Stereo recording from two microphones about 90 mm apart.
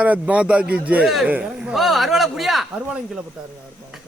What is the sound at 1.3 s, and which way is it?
Speech, 15° right (ahead or behind).